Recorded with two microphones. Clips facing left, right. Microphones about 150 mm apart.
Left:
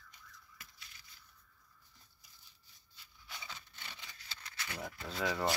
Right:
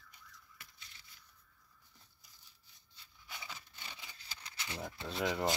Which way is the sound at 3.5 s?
10° right (ahead or behind).